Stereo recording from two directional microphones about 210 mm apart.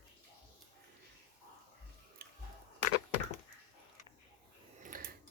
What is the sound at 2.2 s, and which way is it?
Chewing, 45° right (ahead or behind).